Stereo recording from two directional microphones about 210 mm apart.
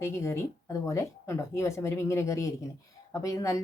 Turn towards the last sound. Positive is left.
turn(degrees=15)  # may be behind; listen again after turning